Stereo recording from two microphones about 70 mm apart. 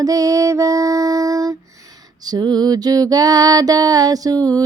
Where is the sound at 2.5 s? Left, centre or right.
Right.